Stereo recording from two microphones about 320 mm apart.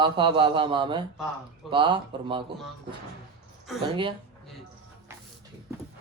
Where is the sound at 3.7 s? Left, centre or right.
Centre.